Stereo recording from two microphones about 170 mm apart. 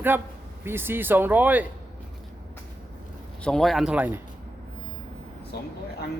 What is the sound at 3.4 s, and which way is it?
Speech, centre (ahead or behind).